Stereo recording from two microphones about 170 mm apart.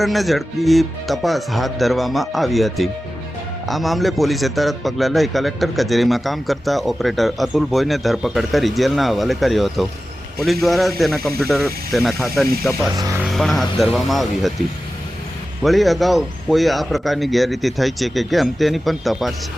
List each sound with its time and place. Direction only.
0.0 s a man's voice: centre (ahead or behind)
13.0 s speech: 20° right (ahead or behind)
13.3 s a man's voice: centre (ahead or behind)
15.6 s a man's voice: centre (ahead or behind)